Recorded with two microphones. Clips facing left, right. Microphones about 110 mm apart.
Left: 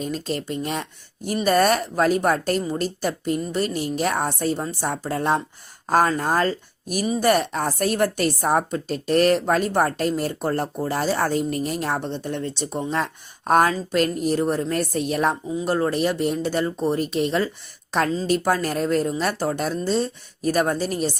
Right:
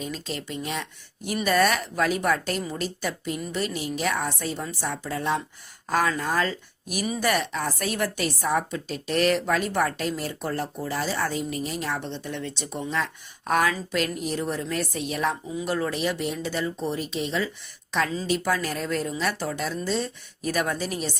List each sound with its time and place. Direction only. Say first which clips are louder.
0.0 s a woman's voice: left 6 dB; 45° left (ahead or behind)
15.4 s a woman's voice: left 5 dB; 35° left (ahead or behind)